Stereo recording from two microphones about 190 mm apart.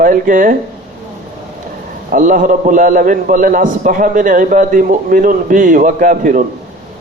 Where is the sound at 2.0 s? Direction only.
45° right (ahead or behind).